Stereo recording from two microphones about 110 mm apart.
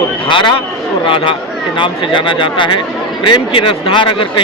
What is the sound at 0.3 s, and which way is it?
Speech, 45° left (ahead or behind).